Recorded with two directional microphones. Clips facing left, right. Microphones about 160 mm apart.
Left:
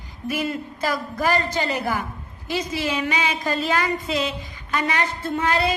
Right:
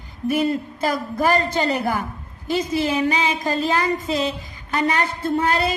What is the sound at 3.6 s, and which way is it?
Speech, 40° right (ahead or behind).